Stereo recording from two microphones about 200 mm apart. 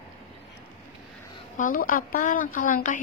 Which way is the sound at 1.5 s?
40° left (ahead or behind).